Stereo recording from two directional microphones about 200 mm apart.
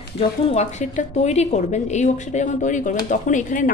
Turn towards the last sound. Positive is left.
turn(degrees=40)  # may be behind; listen again after turning